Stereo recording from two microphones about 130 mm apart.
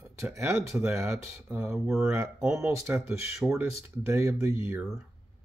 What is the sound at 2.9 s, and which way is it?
Speech, 15° right (ahead or behind).